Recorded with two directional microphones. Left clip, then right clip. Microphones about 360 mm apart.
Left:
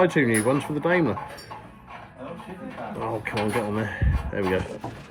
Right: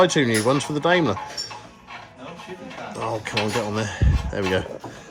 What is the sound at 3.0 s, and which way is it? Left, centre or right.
Speech, centre.